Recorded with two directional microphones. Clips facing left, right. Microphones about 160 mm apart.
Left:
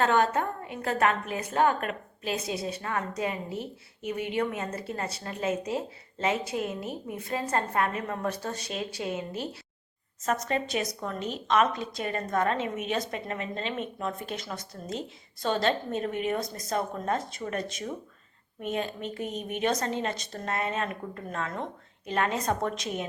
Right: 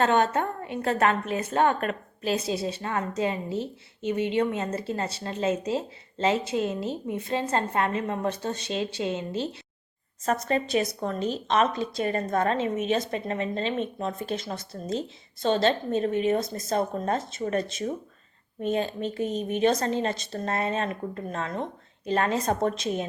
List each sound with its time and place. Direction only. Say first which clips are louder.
0.0 s a woman's voice: right 2 dB; 25° right (ahead or behind)